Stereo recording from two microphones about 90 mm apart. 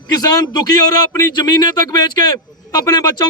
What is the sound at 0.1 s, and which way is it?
A man's voice, 45° left (ahead or behind).